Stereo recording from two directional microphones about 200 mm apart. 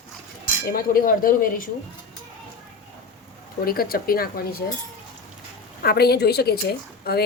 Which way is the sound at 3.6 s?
50° left (ahead or behind).